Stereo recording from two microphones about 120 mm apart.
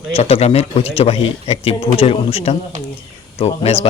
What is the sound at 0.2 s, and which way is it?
A man's voice, 60° left (ahead or behind).